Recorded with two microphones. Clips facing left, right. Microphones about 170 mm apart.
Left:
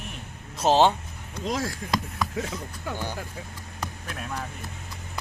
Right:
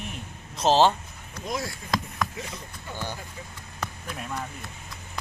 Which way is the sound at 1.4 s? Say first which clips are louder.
Left 3 dB; 90° left.